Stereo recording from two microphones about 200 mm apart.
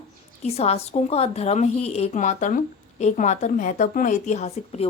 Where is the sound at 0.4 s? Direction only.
30° left (ahead or behind).